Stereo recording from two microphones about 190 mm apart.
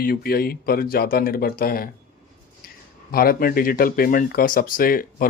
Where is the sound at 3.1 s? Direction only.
50° left (ahead or behind).